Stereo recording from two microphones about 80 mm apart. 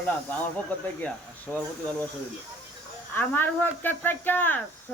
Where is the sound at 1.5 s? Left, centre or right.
Centre.